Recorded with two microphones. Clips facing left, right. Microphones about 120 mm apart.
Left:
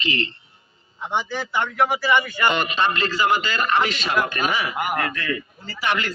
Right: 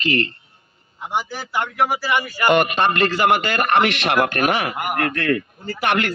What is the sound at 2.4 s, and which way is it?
A man's voice, 55° right (ahead or behind).